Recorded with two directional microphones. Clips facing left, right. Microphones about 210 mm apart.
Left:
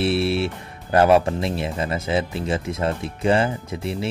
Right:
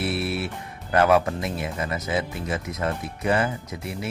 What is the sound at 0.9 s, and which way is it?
Speech, 25° left (ahead or behind).